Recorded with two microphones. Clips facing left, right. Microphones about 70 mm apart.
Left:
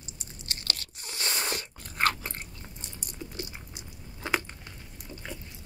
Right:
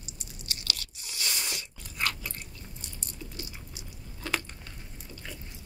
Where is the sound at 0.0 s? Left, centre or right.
Left.